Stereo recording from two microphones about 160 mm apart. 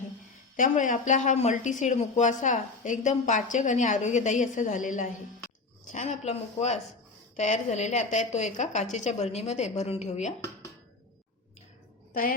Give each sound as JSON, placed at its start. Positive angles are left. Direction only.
{"t": 0.5, "sound": "speech", "side_deg": 55}